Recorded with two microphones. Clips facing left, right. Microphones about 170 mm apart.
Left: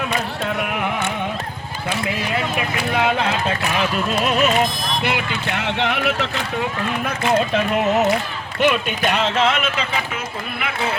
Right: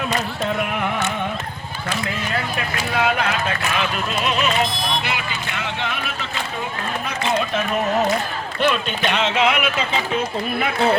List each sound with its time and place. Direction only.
2.0 s speech: 20° left (ahead or behind)
4.2 s speech: 45° left (ahead or behind); by 6.2 s 70° left (ahead or behind)
8.6 s speech: 10° left (ahead or behind)
9.3 s speech: 10° right (ahead or behind)